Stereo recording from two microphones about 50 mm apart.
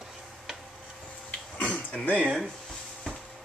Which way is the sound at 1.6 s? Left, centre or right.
Left.